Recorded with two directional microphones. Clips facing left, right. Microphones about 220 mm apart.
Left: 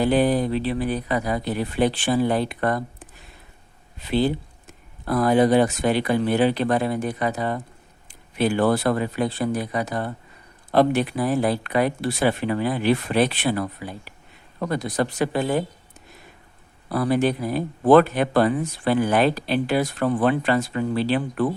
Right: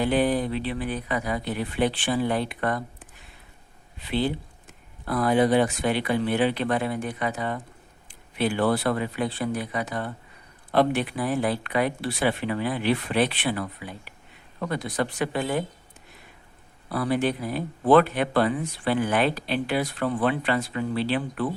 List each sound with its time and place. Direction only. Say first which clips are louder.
0.0 s speech: left 3 dB; 40° left (ahead or behind)
16.9 s speech: left 4 dB; 40° left (ahead or behind)